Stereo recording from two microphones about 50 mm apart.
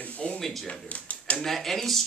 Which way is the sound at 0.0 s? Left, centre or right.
Left.